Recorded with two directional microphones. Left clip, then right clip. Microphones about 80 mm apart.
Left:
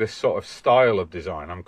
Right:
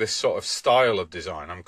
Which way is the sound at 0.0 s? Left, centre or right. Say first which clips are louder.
Left 1 dB; right.